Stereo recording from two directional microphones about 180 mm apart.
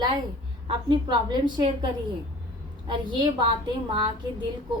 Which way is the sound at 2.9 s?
25° right (ahead or behind).